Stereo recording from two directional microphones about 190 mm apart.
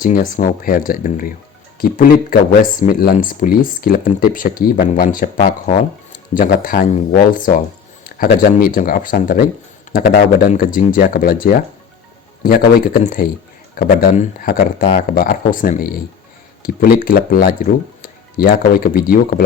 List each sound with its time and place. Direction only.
0.0 s speech: 45° left (ahead or behind)